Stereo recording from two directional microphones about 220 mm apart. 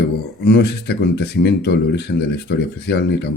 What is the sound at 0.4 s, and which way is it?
Speech, 50° left (ahead or behind).